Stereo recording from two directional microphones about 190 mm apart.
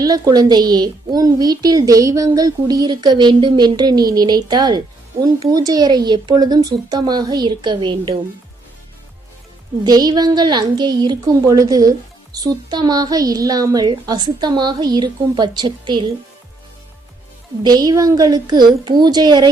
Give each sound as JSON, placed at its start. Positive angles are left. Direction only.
{"t": 0.0, "sound": "a woman's voice", "side_deg": -20}
{"t": 9.8, "sound": "a woman's voice", "side_deg": -20}
{"t": 17.6, "sound": "a woman's voice", "side_deg": -20}